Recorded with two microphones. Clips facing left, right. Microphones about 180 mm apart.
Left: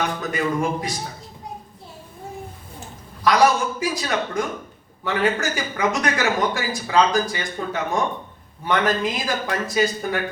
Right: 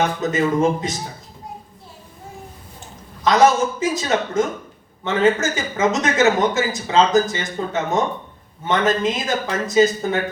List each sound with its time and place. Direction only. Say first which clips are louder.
0.2 s a man's voice: right 5 dB; 20° right (ahead or behind)
3.2 s a man's voice: right 3 dB; 20° right (ahead or behind)